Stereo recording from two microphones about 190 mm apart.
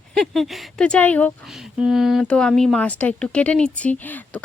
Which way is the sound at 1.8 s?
Centre (ahead or behind).